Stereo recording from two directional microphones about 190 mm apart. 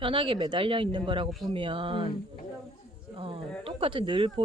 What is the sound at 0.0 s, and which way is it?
Speech, 25° right (ahead or behind).